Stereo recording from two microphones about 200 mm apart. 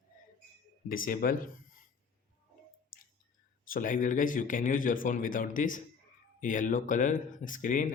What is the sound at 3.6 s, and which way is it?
A man's voice, 45° left (ahead or behind).